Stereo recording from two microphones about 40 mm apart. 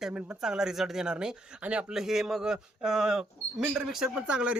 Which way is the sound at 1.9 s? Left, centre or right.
Centre.